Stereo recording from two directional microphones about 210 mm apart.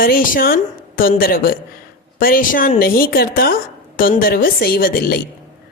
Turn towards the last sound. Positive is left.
turn(degrees=45)  # may be behind; listen again after turning